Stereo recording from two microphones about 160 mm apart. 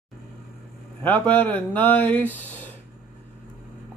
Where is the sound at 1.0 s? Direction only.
10° left (ahead or behind).